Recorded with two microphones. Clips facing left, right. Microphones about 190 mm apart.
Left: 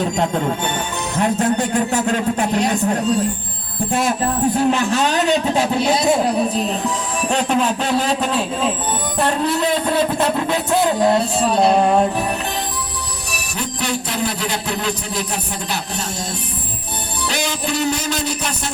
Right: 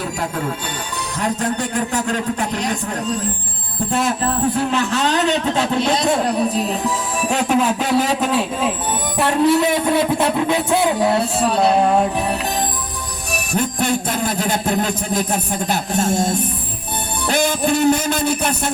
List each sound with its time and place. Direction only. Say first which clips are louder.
1.1 s speech: left 4 dB; 20° left (ahead or behind)
4.7 s a man's voice: left 1 dB; 15° left (ahead or behind); by 12.0 s centre (ahead or behind)
13.3 s music: right 7 dB; 50° right (ahead or behind)